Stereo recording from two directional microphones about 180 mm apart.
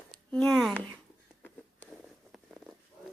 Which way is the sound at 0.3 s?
5° left (ahead or behind).